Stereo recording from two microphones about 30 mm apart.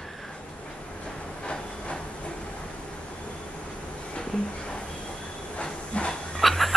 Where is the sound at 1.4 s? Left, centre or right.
Left.